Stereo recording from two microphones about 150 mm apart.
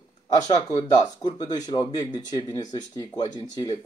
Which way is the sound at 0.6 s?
30° left (ahead or behind).